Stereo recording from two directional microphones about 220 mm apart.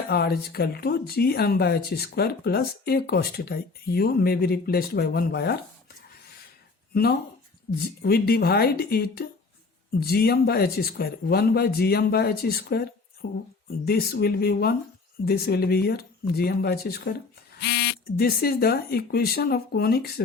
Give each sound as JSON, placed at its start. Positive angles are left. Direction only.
{"t": 0.1, "sound": "speech", "side_deg": 45}
{"t": 6.9, "sound": "speech", "side_deg": 45}
{"t": 13.2, "sound": "speech", "side_deg": 55}
{"t": 13.7, "sound": "speech", "side_deg": 45}